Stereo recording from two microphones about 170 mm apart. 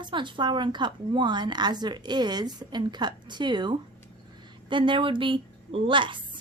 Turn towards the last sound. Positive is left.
turn(degrees=-30)  # may be behind; listen again after turning